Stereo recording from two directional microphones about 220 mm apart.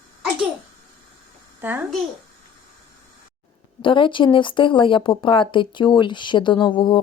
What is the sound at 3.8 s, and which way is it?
Speech, 20° left (ahead or behind).